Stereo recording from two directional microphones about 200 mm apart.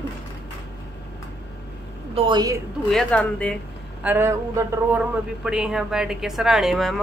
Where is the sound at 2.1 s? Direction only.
25° right (ahead or behind).